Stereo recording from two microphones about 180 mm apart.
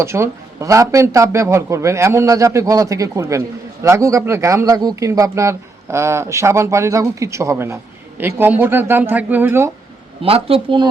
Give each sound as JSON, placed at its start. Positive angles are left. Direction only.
{"t": 0.0, "sound": "speech", "side_deg": -15}
{"t": 10.2, "sound": "speech", "side_deg": -30}